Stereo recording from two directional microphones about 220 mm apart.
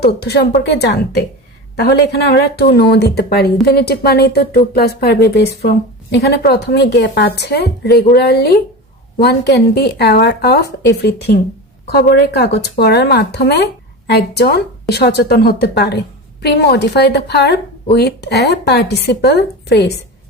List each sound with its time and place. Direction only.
0.0 s a woman's voice: 50° left (ahead or behind)